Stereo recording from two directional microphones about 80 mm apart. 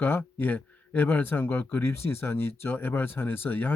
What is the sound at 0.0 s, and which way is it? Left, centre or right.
Speech, left.